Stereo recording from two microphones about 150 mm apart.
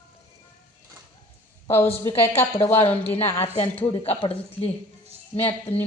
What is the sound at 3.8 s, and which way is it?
Speech, 35° left (ahead or behind).